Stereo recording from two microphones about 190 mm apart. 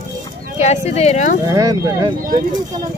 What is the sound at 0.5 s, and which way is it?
Speech, 35° left (ahead or behind).